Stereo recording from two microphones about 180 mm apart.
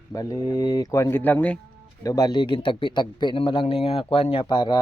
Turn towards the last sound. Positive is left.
turn(degrees=25)  # may be behind; listen again after turning